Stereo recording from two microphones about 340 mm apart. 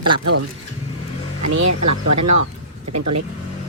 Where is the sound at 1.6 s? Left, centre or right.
Right.